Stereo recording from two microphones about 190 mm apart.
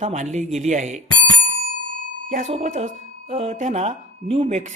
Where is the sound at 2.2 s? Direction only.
45° right (ahead or behind).